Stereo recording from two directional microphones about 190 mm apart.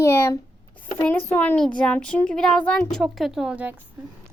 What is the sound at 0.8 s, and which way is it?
A child's voice, 10° left (ahead or behind).